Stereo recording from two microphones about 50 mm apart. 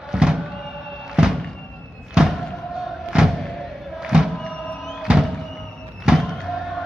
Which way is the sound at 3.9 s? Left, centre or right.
Centre.